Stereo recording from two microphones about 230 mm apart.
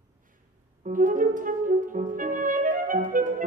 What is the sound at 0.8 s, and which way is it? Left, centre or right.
Music, right.